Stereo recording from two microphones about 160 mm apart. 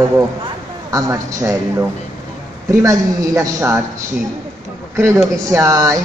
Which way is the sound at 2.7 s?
15° right (ahead or behind).